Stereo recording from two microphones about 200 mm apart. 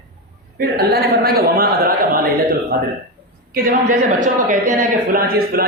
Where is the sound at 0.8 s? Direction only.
50° right (ahead or behind).